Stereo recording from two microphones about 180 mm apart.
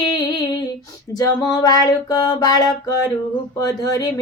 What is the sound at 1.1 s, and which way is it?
Female singing, 20° left (ahead or behind).